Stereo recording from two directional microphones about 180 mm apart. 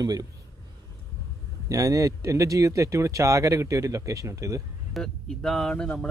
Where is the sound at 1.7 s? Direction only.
20° right (ahead or behind).